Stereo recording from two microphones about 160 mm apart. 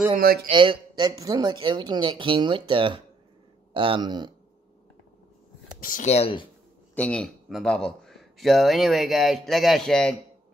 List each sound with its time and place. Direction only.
0.1 s speech: 70° right (ahead or behind)
0.5 s speech: 30° right (ahead or behind)
5.8 s speech: 60° left (ahead or behind)
6.0 s speech: 40° left (ahead or behind)
7.0 s speech: 5° left (ahead or behind)